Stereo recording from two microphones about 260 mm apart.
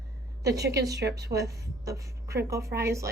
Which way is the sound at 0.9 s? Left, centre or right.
Right.